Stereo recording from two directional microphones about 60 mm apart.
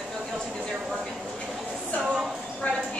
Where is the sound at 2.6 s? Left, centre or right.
Left.